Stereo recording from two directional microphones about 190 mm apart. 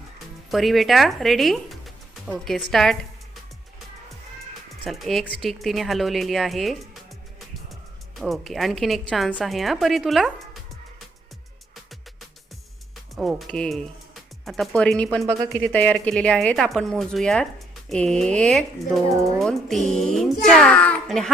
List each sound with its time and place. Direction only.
0.5 s speech: centre (ahead or behind)
4.8 s speech: centre (ahead or behind)
8.2 s speech: centre (ahead or behind)
13.1 s speech: centre (ahead or behind)